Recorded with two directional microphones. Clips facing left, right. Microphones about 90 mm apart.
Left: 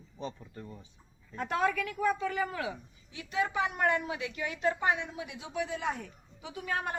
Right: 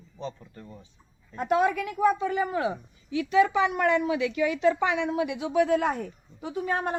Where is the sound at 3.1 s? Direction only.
90° right; by 7.0 s 35° right (ahead or behind).